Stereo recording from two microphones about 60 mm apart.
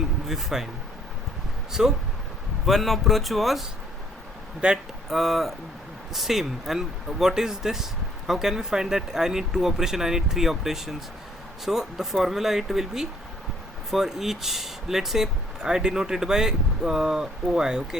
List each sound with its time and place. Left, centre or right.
0.3 s speech: centre
1.7 s speech: centre
4.6 s speech: centre
5.0 s speech: centre